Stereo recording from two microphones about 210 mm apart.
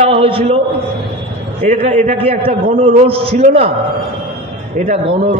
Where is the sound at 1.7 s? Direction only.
35° right (ahead or behind).